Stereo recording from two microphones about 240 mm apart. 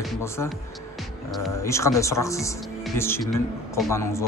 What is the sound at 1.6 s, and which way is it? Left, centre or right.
Speech, centre.